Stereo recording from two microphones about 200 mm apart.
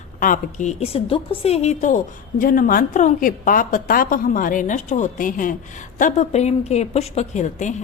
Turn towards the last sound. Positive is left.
turn(degrees=35)  # may be behind; listen again after turning